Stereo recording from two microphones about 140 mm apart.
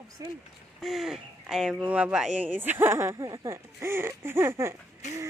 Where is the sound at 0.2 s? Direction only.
25° right (ahead or behind).